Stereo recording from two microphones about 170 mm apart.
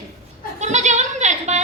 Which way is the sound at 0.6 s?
45° right (ahead or behind).